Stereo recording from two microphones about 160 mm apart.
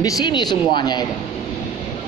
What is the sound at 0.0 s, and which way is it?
Speech, 25° left (ahead or behind).